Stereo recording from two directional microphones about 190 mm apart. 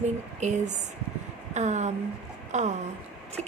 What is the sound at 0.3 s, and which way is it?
A woman's voice, 40° right (ahead or behind).